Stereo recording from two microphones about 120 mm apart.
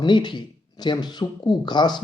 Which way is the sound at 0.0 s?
40° left (ahead or behind).